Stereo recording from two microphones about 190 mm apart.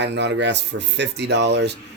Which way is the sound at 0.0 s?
65° right (ahead or behind).